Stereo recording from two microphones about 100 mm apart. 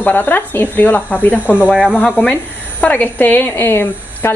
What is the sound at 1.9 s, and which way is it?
A woman's voice, 15° left (ahead or behind).